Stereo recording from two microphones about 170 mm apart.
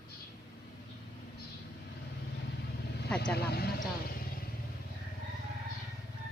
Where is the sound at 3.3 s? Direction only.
70° left (ahead or behind).